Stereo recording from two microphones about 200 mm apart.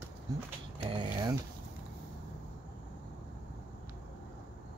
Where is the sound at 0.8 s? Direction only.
20° right (ahead or behind).